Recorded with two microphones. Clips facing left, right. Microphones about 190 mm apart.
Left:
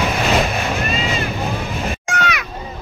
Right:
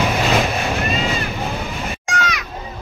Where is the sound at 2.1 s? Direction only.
65° left (ahead or behind).